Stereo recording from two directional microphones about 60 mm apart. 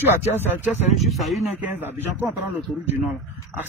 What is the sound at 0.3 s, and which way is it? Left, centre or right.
Speech, right.